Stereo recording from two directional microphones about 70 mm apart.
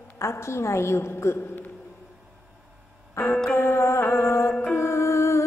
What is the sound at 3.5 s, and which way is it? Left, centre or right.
Music, left.